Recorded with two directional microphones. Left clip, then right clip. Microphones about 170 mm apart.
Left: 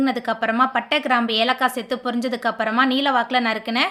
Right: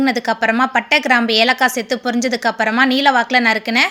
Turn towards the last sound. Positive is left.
turn(degrees=-15)  # may be behind; listen again after turning